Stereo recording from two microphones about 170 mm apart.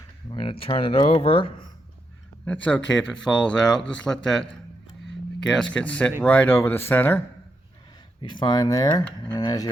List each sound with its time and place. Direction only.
0.3 s a sound: 30° left (ahead or behind)
0.6 s speech: 35° left (ahead or behind)
2.4 s speech: 10° left (ahead or behind)
8.2 s speech: 25° left (ahead or behind)